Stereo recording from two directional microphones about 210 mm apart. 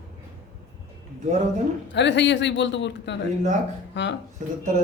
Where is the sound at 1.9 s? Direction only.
55° left (ahead or behind).